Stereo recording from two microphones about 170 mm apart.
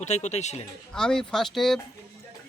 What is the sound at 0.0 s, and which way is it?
Speech, 40° left (ahead or behind).